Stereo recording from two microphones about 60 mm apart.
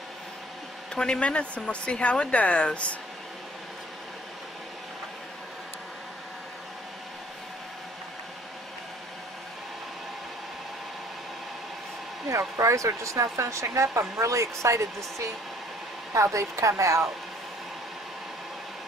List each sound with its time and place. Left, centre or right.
0.9 s a woman's voice: centre
12.3 s speech: right